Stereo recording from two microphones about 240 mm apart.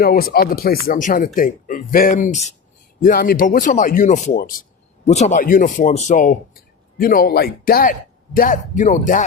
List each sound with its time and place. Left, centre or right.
0.0 s speech: left